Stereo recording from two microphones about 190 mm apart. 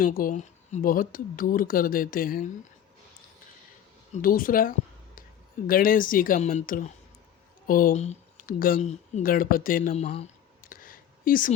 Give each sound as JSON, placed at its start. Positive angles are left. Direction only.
{"t": 0.0, "sound": "speech", "side_deg": 50}
{"t": 4.1, "sound": "speech", "side_deg": 50}
{"t": 10.6, "sound": "a sound", "side_deg": 50}